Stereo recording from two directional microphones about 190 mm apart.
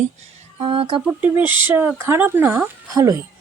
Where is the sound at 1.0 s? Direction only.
10° right (ahead or behind).